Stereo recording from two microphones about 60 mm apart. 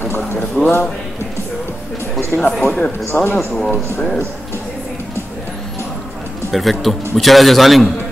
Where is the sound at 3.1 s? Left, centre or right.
Left.